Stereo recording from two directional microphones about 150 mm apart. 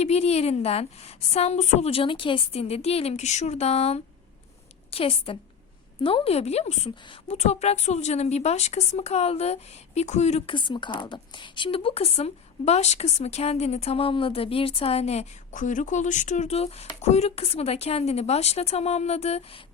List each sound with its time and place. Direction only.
0.0 s a woman's voice: 45° left (ahead or behind)
10.5 s speech: 30° left (ahead or behind)